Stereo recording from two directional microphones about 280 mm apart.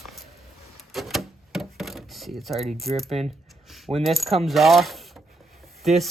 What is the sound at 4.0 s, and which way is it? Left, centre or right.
Coin, centre.